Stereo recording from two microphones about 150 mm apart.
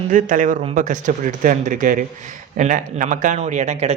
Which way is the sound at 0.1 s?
60° right (ahead or behind).